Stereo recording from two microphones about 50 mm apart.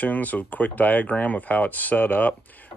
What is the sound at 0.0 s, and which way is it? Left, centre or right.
Speech, left.